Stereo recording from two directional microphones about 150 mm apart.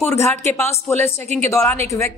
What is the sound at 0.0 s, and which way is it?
Speech, 15° left (ahead or behind).